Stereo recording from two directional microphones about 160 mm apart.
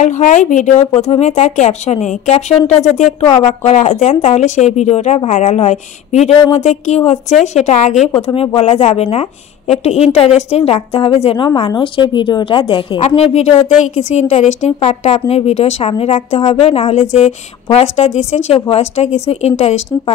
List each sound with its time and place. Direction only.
0.0 s speech: 50° left (ahead or behind); by 13.0 s 30° left (ahead or behind)
13.0 s speech: 40° left (ahead or behind)